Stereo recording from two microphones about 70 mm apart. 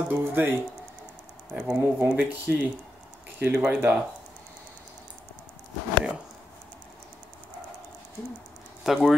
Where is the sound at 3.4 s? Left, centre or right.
Centre.